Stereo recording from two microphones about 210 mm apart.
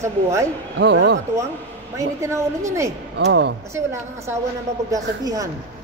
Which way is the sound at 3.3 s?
55° right (ahead or behind).